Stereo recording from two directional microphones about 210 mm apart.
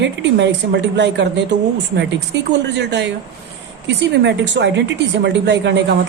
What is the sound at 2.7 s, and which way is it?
A woman's voice, 55° right (ahead or behind).